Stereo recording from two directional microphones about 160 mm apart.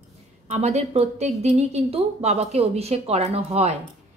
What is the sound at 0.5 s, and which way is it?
A woman's voice, 40° right (ahead or behind).